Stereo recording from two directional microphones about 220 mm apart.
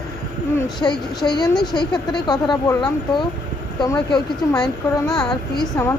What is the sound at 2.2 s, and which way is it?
Speech, 20° left (ahead or behind).